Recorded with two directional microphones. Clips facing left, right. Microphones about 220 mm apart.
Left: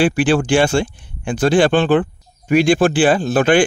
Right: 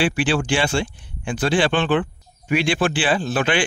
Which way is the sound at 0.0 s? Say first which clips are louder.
Left 5 dB; 45° left (ahead or behind).